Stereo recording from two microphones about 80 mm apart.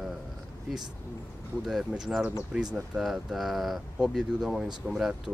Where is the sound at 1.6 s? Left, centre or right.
Centre.